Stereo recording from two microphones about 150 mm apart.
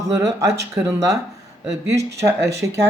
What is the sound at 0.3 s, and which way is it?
Speech, 20° right (ahead or behind).